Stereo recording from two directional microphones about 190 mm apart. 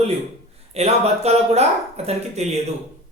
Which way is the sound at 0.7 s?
35° right (ahead or behind).